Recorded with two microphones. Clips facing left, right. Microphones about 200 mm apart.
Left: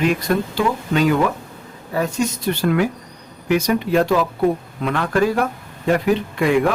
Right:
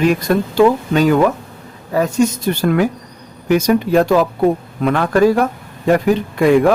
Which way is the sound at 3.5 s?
45° right (ahead or behind).